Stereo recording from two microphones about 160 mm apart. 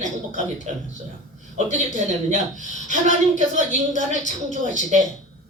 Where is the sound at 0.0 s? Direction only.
50° right (ahead or behind).